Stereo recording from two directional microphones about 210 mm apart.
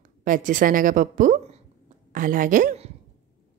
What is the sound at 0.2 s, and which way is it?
A woman's voice, 40° right (ahead or behind).